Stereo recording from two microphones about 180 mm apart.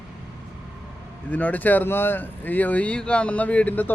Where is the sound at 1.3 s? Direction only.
10° left (ahead or behind).